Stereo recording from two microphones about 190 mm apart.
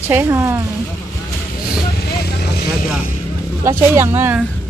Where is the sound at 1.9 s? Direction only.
55° left (ahead or behind).